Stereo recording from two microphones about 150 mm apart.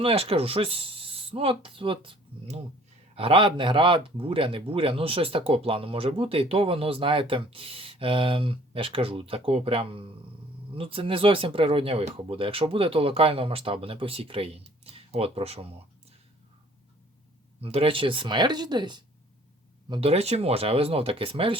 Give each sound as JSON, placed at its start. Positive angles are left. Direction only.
{"t": 0.0, "sound": "speech", "side_deg": -40}
{"t": 3.2, "sound": "speech", "side_deg": -35}
{"t": 17.6, "sound": "speech", "side_deg": -40}
{"t": 19.9, "sound": "speech", "side_deg": -40}